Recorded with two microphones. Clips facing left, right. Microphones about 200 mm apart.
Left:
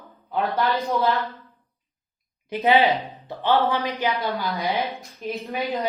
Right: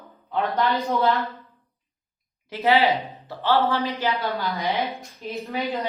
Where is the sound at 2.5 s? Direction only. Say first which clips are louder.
Left 1 dB; 15° left (ahead or behind).